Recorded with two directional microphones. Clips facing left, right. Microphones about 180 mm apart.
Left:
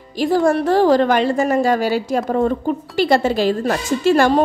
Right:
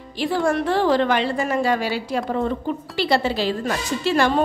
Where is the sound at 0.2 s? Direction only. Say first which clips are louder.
Left 5 dB; 40° left (ahead or behind).